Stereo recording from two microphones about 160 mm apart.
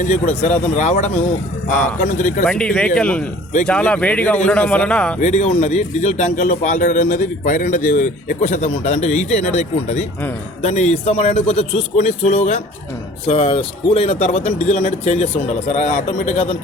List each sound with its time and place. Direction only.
0.0 s a man's voice: 50° left (ahead or behind)
2.4 s speech: 5° left (ahead or behind)
5.2 s a man's voice: 45° left (ahead or behind)